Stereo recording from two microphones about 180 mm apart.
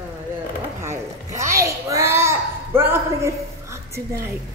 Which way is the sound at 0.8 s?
15° right (ahead or behind).